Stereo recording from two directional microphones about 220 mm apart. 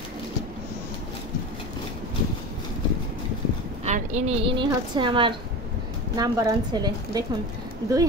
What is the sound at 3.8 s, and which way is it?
A woman's voice, 30° right (ahead or behind).